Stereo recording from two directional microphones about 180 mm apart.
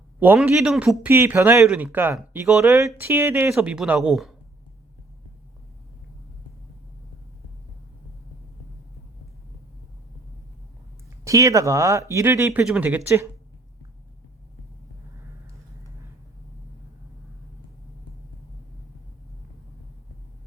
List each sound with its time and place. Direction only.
0.2 s speech: 10° right (ahead or behind)
11.2 s speech: 20° right (ahead or behind)